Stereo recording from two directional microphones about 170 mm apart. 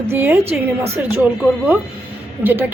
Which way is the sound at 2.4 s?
10° right (ahead or behind).